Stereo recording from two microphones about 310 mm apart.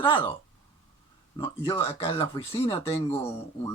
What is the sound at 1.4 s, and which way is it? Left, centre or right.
Speech, centre.